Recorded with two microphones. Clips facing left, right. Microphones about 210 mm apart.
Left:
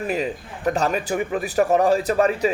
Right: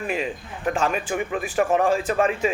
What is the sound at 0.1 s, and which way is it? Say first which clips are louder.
Speech: left 2 dB; 40° left (ahead or behind).